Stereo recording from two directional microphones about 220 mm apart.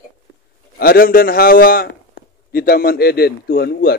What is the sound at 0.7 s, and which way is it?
A man's voice, 40° left (ahead or behind).